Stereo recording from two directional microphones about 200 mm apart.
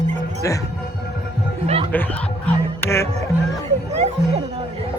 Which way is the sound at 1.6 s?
30° right (ahead or behind).